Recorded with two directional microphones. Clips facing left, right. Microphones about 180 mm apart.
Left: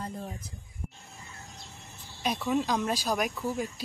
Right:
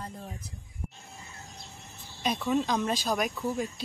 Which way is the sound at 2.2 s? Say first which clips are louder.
Right 1 dB; 5° left (ahead or behind).